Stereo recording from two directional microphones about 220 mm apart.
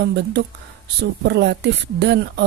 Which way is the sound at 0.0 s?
50° right (ahead or behind).